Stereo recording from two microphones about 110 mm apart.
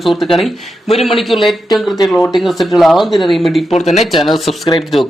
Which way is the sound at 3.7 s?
90° left.